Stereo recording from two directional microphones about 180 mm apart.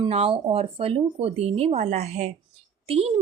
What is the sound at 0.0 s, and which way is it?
Speech, 30° right (ahead or behind).